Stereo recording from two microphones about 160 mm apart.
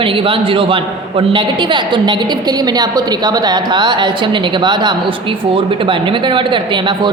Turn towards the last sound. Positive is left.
turn(degrees=-30)  # may be behind; listen again after turning